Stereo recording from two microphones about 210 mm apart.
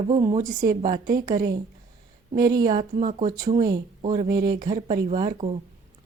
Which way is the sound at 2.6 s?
35° right (ahead or behind).